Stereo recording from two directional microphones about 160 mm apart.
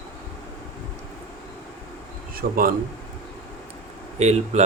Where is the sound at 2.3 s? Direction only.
65° right (ahead or behind).